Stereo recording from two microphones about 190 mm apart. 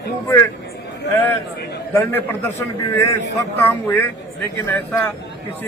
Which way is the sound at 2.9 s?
15° left (ahead or behind).